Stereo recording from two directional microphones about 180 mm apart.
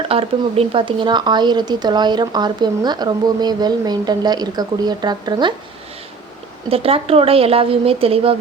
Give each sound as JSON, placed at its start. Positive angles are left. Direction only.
{"t": 0.1, "sound": "speech", "side_deg": -35}
{"t": 6.7, "sound": "a woman's voice", "side_deg": -30}